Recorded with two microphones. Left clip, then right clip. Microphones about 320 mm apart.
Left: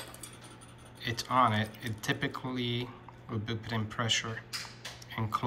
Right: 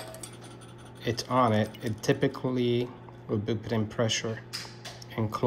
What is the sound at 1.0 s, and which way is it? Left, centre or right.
Speech, centre.